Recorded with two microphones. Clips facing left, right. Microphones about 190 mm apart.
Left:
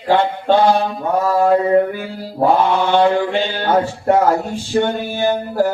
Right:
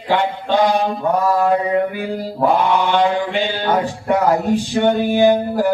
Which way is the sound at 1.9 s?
15° right (ahead or behind).